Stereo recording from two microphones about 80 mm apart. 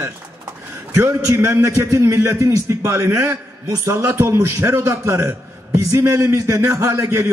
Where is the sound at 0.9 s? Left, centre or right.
Right.